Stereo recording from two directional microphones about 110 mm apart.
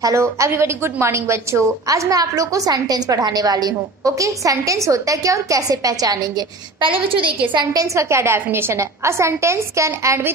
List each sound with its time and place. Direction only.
0.0 s a woman's voice: 25° right (ahead or behind)
6.8 s a woman's voice: 50° right (ahead or behind)
7.7 s a woman's voice: 30° right (ahead or behind)